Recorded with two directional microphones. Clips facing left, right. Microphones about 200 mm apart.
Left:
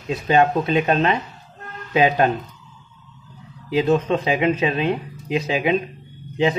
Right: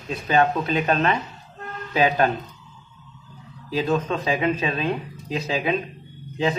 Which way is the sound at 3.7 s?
20° left (ahead or behind).